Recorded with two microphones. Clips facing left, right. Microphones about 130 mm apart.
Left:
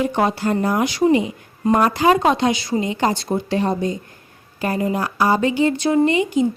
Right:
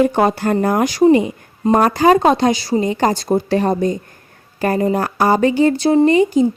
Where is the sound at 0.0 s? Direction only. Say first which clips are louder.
Right 5 dB; 50° right (ahead or behind).